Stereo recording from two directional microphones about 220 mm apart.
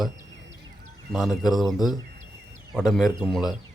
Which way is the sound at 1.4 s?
Centre (ahead or behind).